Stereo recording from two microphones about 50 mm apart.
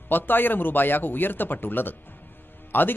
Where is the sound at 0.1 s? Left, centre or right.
Left.